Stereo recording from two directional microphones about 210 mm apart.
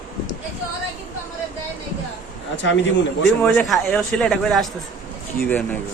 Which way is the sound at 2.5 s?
60° left (ahead or behind).